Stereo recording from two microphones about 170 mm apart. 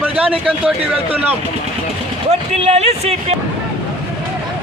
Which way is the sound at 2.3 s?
40° right (ahead or behind).